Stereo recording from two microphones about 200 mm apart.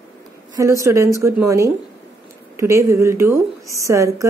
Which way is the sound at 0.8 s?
15° right (ahead or behind).